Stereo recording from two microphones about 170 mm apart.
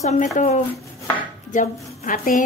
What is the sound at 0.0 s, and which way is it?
Speech, 45° left (ahead or behind).